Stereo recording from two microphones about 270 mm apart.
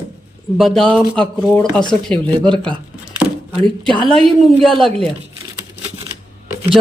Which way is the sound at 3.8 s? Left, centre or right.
Centre.